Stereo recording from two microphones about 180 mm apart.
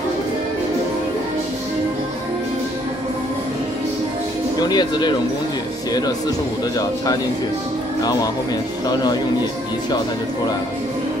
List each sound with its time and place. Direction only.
4.6 s speech: 25° left (ahead or behind)
8.0 s speech: 20° left (ahead or behind)